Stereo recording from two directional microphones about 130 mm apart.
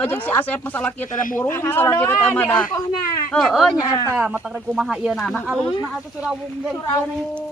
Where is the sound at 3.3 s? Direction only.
Centre (ahead or behind).